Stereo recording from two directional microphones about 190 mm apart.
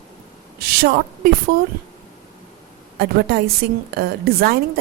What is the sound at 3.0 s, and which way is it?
A woman's voice, 55° right (ahead or behind).